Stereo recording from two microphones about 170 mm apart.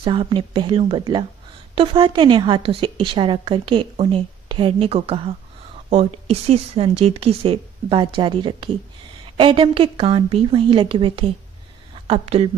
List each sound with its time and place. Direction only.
0.0 s a woman's voice: 30° right (ahead or behind)